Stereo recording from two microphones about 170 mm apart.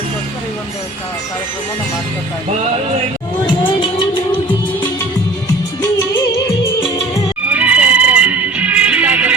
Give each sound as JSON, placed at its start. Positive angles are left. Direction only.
{"t": 3.4, "sound": "music", "side_deg": 30}
{"t": 7.5, "sound": "music", "side_deg": -10}